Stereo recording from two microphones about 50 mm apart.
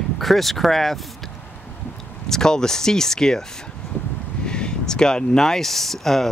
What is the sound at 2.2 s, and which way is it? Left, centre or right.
Speech, centre.